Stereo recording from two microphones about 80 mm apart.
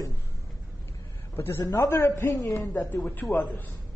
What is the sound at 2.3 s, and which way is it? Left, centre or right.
Speech, left.